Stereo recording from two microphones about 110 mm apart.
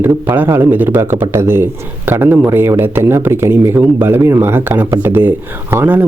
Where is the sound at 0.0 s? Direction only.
15° right (ahead or behind).